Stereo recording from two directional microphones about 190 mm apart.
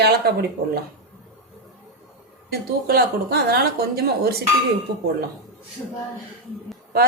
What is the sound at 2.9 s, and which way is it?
Speech, 55° right (ahead or behind).